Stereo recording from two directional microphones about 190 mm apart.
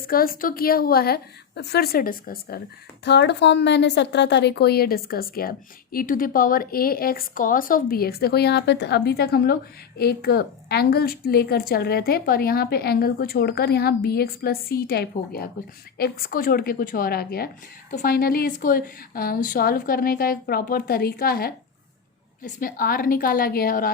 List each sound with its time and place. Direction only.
0.1 s a woman's voice: 50° left (ahead or behind)
3.0 s a woman's voice: 65° left (ahead or behind)
22.6 s a woman's voice: 50° left (ahead or behind)